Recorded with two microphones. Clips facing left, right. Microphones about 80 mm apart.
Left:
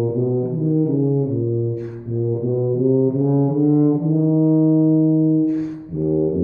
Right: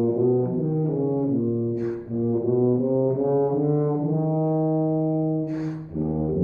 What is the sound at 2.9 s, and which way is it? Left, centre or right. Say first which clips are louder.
Brass instrument: left 4 dB; centre.